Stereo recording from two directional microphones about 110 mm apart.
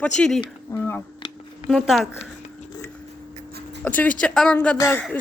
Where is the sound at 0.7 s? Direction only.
30° left (ahead or behind).